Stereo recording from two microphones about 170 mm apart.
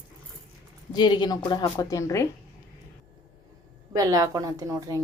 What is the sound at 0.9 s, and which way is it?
A woman's voice, 25° left (ahead or behind).